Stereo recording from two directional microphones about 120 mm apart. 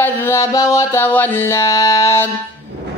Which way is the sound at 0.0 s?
20° left (ahead or behind).